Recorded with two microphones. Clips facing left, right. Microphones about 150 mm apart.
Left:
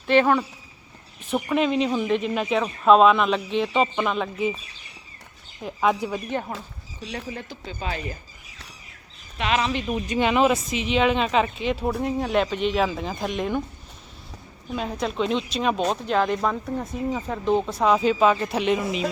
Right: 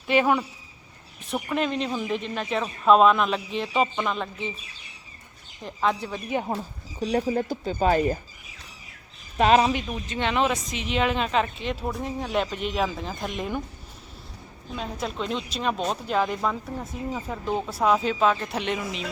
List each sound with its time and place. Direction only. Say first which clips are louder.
0.1 s speech: left 3 dB; 10° right (ahead or behind)
5.6 s speech: left 3 dB; 10° left (ahead or behind)
7.0 s speech: right 10 dB; 40° right (ahead or behind)
9.4 s speech: right 6 dB; 40° right (ahead or behind)
9.8 s speech: left 5 dB; 15° left (ahead or behind); by 13.6 s centre (ahead or behind)
14.8 s speech: left 5 dB; centre (ahead or behind)